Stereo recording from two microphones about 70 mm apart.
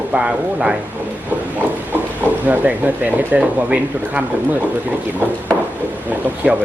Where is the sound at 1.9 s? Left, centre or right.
Right.